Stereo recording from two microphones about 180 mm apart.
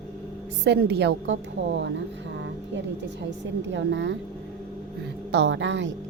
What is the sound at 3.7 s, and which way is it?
Speech, 90° right.